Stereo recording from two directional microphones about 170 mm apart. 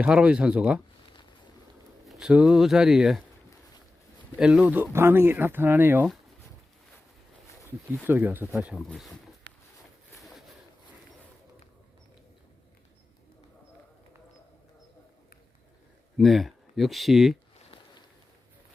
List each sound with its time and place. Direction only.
0.0 s speech: 5° right (ahead or behind)
2.0 s speech: 5° right (ahead or behind)
4.4 s speech: 5° right (ahead or behind)
8.0 s speech: 10° right (ahead or behind)
9.5 s a sound: 85° right
16.1 s speech: centre (ahead or behind)